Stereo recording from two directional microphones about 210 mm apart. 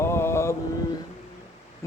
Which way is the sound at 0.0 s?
10° left (ahead or behind).